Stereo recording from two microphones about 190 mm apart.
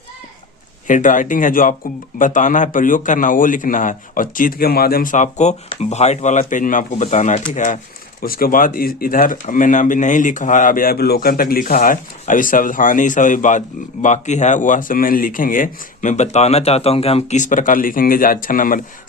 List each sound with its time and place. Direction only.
0.9 s speech: 45° left (ahead or behind)